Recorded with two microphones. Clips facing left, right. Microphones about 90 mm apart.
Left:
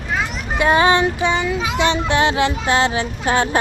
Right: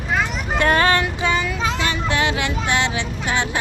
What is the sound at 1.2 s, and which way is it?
Child singing, 20° left (ahead or behind).